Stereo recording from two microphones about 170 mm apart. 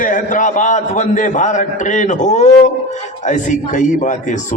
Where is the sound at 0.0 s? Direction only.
50° left (ahead or behind).